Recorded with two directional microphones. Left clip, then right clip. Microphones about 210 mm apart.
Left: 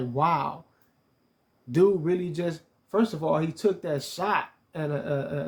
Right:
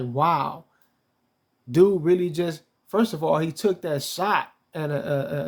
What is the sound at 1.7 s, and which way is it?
Speech, 25° right (ahead or behind).